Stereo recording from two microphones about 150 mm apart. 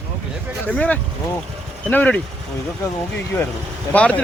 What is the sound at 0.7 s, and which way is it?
Speech, 10° left (ahead or behind).